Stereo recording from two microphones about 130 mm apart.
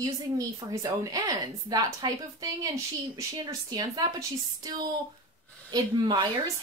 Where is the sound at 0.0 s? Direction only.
30° right (ahead or behind).